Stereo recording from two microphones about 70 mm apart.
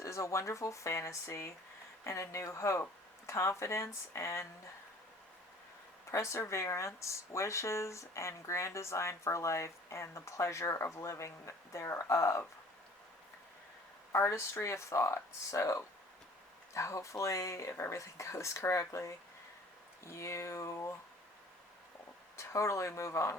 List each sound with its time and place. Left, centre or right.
0.0 s speech: left
6.1 s speech: left
14.1 s speech: left
22.4 s speech: left